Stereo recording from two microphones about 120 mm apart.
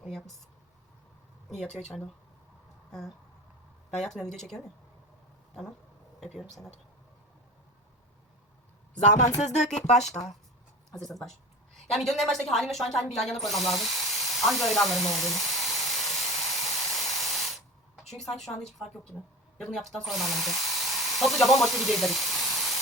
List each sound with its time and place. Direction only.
1.5 s speech: centre (ahead or behind)
3.9 s speech: centre (ahead or behind)
6.1 s speech: centre (ahead or behind)
9.4 s music: 75° left (ahead or behind)
11.0 s speech: centre (ahead or behind)
13.1 s hiss: centre (ahead or behind)
19.5 s speech: 5° left (ahead or behind)